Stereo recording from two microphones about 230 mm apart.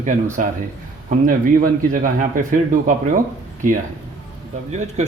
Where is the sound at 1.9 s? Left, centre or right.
Right.